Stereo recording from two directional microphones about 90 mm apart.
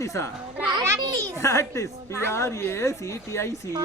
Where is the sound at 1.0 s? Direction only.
40° right (ahead or behind).